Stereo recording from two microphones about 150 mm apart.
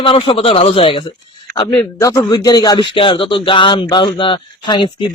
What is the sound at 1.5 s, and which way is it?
Speech, 25° left (ahead or behind).